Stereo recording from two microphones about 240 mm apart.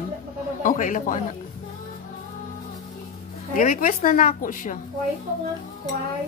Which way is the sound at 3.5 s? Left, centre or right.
Left.